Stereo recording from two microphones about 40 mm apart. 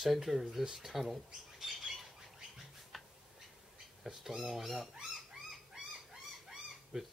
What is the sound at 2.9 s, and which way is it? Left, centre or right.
Tick-tock, centre.